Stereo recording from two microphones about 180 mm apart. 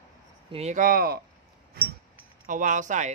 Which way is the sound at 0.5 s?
40° right (ahead or behind).